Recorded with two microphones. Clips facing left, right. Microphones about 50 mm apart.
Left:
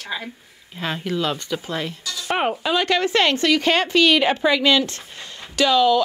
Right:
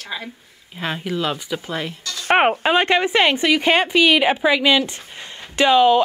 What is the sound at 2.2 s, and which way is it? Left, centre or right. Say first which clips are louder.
Speech: right 6 dB; right.